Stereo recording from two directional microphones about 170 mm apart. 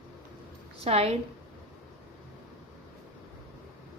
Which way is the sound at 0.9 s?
35° right (ahead or behind).